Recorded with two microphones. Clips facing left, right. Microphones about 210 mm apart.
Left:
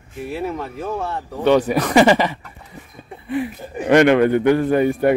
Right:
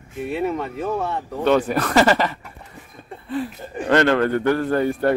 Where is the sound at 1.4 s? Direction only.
10° left (ahead or behind).